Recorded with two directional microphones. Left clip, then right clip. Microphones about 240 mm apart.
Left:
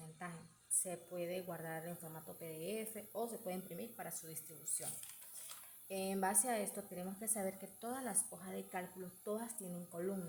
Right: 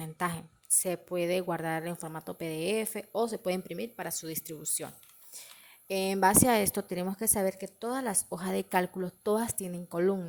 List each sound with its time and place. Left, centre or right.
0.2 s a sound: right
0.8 s a woman's voice: right
5.9 s a woman's voice: right